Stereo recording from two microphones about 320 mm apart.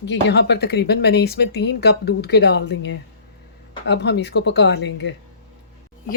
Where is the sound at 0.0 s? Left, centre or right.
Left.